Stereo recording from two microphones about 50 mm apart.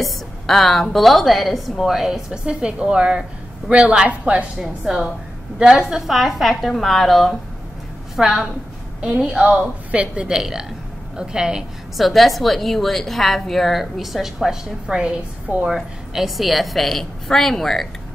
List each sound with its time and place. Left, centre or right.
0.0 s a woman's voice: centre; by 4.5 s right
4.6 s a woman's voice: centre
8.2 s a woman's voice: centre
12.0 s a woman's voice: centre
14.9 s a woman's voice: centre